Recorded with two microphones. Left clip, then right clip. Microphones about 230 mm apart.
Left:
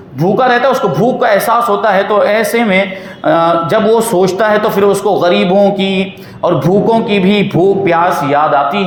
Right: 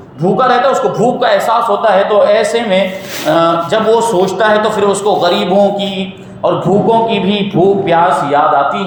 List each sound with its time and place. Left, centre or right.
0.3 s a man's voice: left
6.9 s a man's voice: left